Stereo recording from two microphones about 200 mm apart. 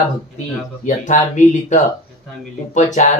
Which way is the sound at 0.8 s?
35° left (ahead or behind).